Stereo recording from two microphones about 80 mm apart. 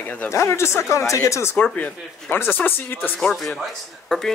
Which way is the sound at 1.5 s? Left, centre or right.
Centre.